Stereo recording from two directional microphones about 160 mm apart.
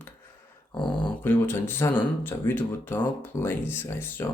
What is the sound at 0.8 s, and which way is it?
Speech, 30° left (ahead or behind).